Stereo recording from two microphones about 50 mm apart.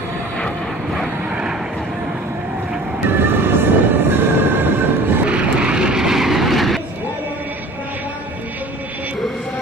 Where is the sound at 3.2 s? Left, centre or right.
Right.